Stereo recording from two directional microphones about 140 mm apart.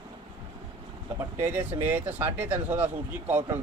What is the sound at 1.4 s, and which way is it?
Speech, 10° right (ahead or behind).